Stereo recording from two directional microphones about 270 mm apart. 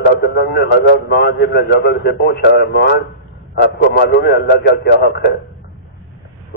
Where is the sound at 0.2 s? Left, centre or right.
Left.